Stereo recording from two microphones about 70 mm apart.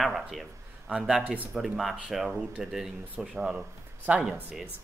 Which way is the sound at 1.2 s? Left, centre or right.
Right.